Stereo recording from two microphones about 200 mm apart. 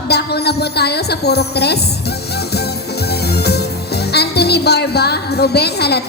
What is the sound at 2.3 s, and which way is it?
Music, 55° left (ahead or behind).